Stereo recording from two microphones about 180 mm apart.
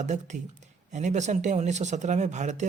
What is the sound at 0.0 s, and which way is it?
Speech, 40° right (ahead or behind).